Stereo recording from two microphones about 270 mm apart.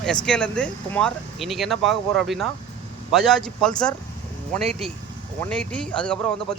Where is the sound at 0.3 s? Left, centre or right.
Centre.